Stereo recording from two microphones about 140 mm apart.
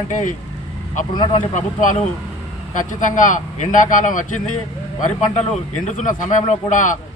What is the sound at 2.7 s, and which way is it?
A man's voice, 65° left (ahead or behind).